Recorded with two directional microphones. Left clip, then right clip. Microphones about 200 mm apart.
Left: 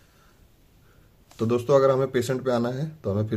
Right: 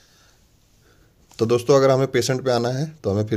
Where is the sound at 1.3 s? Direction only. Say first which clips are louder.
Right 4 dB; 45° right (ahead or behind).